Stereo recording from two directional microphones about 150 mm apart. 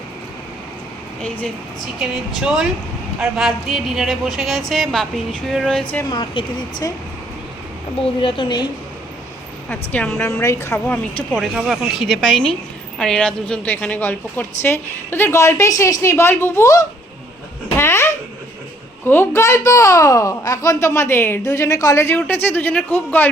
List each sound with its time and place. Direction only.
1.2 s a child's voice: 10° left (ahead or behind)
2.0 s a woman's voice: 5° right (ahead or behind)
6.1 s speech: 30° left (ahead or behind)
8.2 s a woman's voice: 35° left (ahead or behind)
9.6 s a child's voice: 10° left (ahead or behind)
11.3 s a woman's voice: 5° right (ahead or behind); by 16.8 s 20° left (ahead or behind)
17.7 s babbling: 15° left (ahead or behind)
19.0 s a child's voice: 15° left (ahead or behind)